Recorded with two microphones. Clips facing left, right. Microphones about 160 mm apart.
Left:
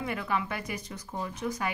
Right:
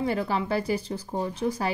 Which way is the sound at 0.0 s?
30° right (ahead or behind).